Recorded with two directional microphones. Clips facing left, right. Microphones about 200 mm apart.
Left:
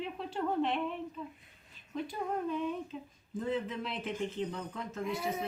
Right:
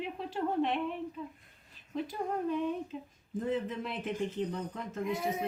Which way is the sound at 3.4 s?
20° right (ahead or behind).